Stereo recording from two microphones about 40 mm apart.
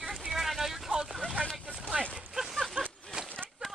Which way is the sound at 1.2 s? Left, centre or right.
Left.